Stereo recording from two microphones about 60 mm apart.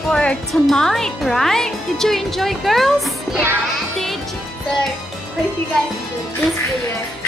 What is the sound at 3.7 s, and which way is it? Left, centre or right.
Music, centre.